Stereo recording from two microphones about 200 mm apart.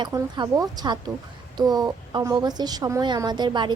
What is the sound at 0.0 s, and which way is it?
A woman's voice, 20° right (ahead or behind).